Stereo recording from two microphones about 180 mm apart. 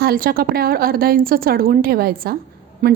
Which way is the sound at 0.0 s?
55° right (ahead or behind).